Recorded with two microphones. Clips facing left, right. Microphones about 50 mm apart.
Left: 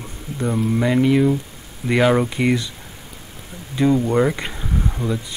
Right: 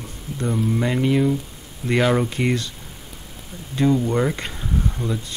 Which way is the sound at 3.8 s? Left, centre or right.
Centre.